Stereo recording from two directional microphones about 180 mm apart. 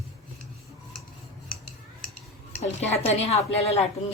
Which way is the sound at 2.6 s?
35° left (ahead or behind).